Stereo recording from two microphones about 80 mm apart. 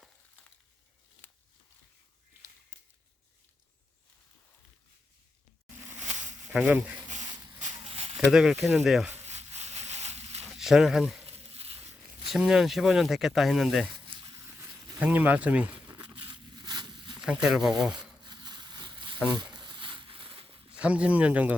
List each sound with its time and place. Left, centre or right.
6.5 s speech: centre
8.1 s speech: centre
10.5 s speech: centre
12.3 s speech: centre
14.1 s a sound: right
14.9 s speech: centre
15.9 s a sound: right
17.2 s speech: centre
18.2 s a sound: right
20.7 s speech: centre